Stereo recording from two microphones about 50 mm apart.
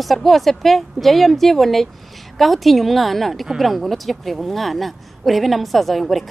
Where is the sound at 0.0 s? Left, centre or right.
Centre.